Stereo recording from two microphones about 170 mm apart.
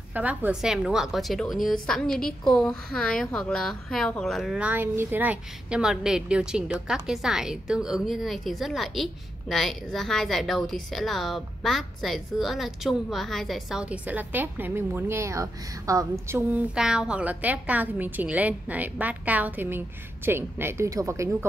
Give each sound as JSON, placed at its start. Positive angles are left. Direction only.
{"t": 0.1, "sound": "a woman's voice", "side_deg": -10}
{"t": 16.7, "sound": "a woman's voice", "side_deg": -5}